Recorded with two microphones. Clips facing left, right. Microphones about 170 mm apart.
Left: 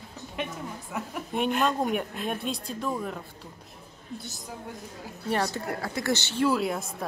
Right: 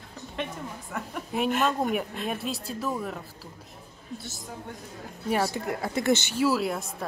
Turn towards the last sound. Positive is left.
turn(degrees=0)  # may be behind; listen again after turning